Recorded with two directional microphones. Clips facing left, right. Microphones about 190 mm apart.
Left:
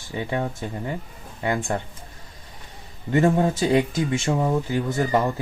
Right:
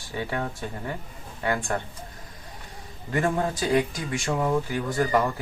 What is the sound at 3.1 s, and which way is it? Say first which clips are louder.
Speech: left 6 dB; 25° left (ahead or behind).